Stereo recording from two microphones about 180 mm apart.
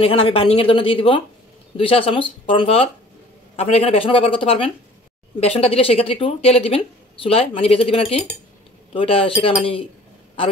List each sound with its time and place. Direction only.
0.0 s a woman's voice: 30° left (ahead or behind)